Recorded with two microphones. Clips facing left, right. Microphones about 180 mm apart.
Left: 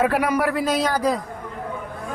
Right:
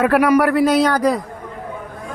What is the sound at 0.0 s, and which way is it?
Speech, 70° right (ahead or behind).